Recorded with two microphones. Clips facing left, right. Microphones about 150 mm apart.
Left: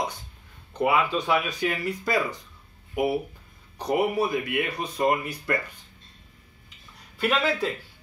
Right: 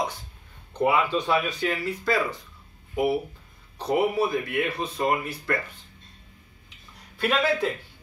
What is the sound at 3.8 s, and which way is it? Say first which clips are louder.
Speech: right 1 dB; 15° left (ahead or behind).